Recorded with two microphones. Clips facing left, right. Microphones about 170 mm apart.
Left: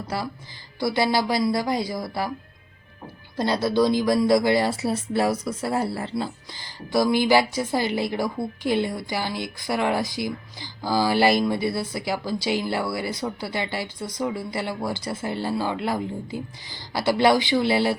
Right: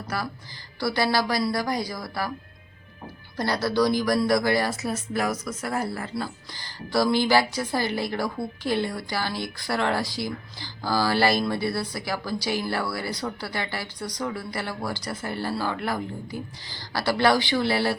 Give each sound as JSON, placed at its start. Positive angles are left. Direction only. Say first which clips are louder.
{"t": 0.1, "sound": "speech", "louder": "left 1 dB", "side_deg": 25}
{"t": 3.3, "sound": "speech", "louder": "left 2 dB", "side_deg": 25}